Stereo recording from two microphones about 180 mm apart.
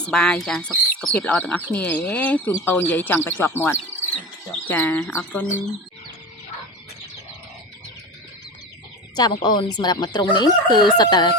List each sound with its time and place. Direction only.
0.1 s speech: 5° left (ahead or behind)
9.1 s speech: 25° left (ahead or behind)